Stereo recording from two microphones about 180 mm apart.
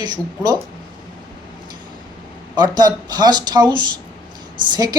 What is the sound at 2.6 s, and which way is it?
Speech, 20° right (ahead or behind).